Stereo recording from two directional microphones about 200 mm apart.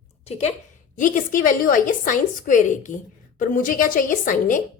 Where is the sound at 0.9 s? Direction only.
40° left (ahead or behind).